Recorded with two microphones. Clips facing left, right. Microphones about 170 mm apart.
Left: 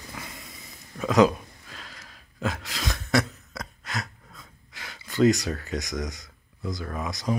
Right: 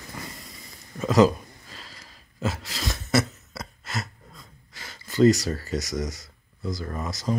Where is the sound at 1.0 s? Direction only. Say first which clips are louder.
Right 1 dB; centre (ahead or behind).